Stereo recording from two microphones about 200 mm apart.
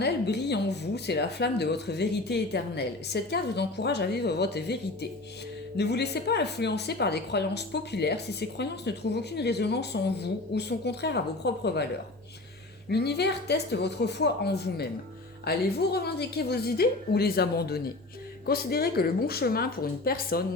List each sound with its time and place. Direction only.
0.0 s a woman's voice: 55° left (ahead or behind)
12.9 s a woman's voice: 55° left (ahead or behind)